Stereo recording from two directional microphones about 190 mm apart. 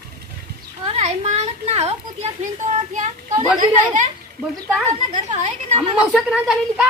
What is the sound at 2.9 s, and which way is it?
Speech, 40° right (ahead or behind).